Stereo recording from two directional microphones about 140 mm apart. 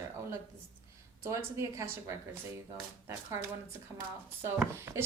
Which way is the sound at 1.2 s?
20° right (ahead or behind).